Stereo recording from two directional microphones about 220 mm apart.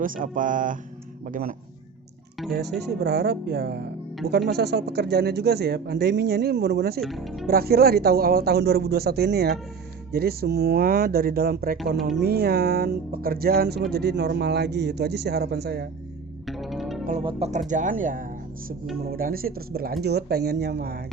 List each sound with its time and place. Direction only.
0.0 s speech: 40° right (ahead or behind)
7.0 s speech: centre (ahead or behind)
7.4 s speech: 45° right (ahead or behind)
11.9 s speech: centre (ahead or behind)
12.2 s speech: 45° right (ahead or behind)
16.5 s music: centre (ahead or behind)
17.1 s speech: 30° right (ahead or behind); by 21.0 s 45° right (ahead or behind)